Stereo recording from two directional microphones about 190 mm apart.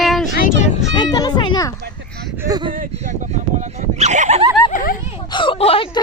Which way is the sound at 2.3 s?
20° right (ahead or behind).